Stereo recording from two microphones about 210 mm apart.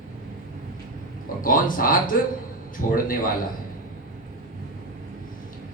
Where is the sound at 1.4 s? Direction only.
40° left (ahead or behind).